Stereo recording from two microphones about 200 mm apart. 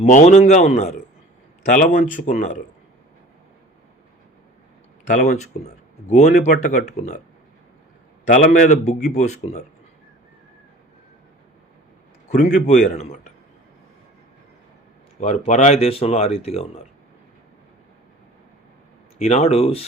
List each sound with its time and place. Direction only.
0.0 s speech: 35° left (ahead or behind)
5.0 s speech: 40° left (ahead or behind)
8.3 s speech: 40° left (ahead or behind)
12.3 s speech: 35° left (ahead or behind)
15.2 s speech: 35° left (ahead or behind)
19.2 s speech: 30° left (ahead or behind)